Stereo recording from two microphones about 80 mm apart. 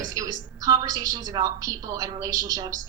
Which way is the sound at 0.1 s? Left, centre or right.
Right.